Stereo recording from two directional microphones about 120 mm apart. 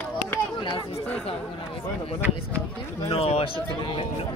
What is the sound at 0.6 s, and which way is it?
Chatter, 45° left (ahead or behind).